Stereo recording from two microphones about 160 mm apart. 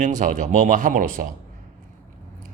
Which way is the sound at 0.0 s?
50° right (ahead or behind).